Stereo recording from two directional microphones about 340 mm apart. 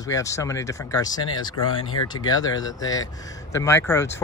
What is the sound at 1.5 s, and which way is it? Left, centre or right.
Speech, left.